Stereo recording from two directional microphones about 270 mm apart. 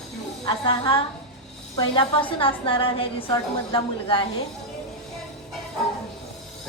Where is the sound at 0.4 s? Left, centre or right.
Centre.